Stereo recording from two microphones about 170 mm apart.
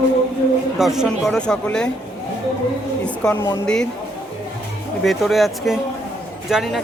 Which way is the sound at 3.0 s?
5° left (ahead or behind).